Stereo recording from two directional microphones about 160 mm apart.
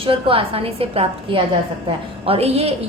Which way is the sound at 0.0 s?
35° right (ahead or behind).